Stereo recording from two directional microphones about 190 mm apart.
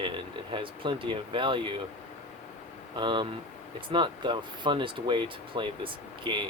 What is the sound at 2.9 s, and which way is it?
Speech, 25° right (ahead or behind).